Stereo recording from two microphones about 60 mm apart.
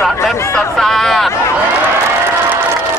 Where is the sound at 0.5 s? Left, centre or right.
Centre.